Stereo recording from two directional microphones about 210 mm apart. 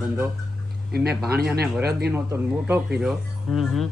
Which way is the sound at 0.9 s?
50° right (ahead or behind).